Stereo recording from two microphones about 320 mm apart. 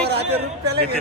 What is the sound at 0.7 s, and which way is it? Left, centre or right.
Speech, right.